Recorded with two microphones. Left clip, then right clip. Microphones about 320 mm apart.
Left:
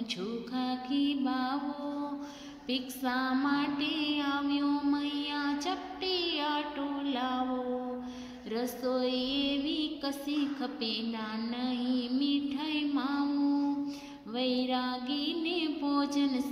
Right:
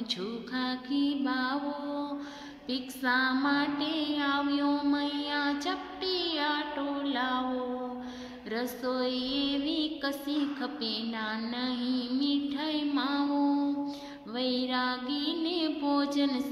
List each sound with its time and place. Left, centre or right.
0.1 s music: centre
2.7 s music: centre
8.5 s music: centre